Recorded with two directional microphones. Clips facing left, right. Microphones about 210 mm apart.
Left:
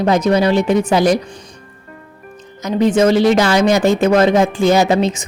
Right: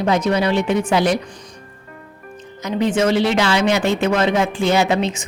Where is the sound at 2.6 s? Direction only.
40° left (ahead or behind).